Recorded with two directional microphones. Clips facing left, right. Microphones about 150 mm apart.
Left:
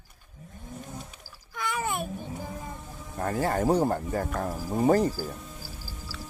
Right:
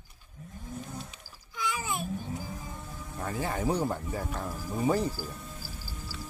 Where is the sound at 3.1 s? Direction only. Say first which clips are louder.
Left 6 dB; 50° left (ahead or behind).